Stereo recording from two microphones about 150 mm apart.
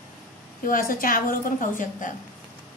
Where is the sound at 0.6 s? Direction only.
70° left (ahead or behind).